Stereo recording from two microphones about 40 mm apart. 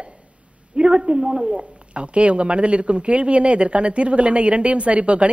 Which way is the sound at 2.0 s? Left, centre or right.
Right.